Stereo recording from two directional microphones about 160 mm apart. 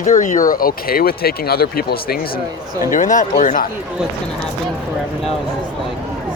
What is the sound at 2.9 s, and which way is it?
Speech, 55° left (ahead or behind).